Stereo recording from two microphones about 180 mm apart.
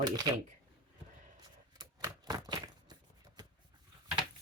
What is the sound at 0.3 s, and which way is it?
Speech, 25° right (ahead or behind).